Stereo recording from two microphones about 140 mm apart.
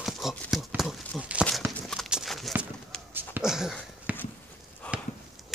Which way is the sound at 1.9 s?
Centre (ahead or behind).